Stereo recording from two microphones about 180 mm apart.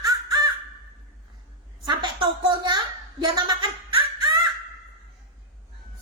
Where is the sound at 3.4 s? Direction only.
25° right (ahead or behind).